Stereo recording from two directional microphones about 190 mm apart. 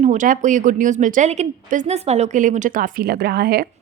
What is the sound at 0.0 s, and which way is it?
A woman's voice, 40° right (ahead or behind).